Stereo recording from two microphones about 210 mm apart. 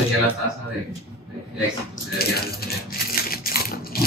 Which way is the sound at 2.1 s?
45° left (ahead or behind).